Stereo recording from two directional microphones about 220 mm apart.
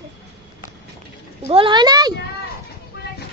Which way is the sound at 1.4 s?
25° right (ahead or behind).